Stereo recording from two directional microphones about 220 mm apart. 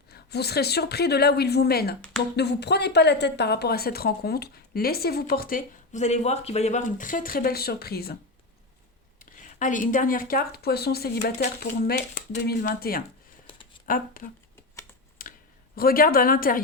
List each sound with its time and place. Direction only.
0.1 s a woman's voice: 45° left (ahead or behind)
9.1 s a woman's voice: 35° left (ahead or behind)
15.2 s clicking: 40° left (ahead or behind)
15.7 s speech: 40° left (ahead or behind)